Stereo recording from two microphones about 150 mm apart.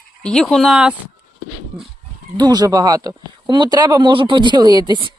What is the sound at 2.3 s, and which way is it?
Speech, 25° right (ahead or behind).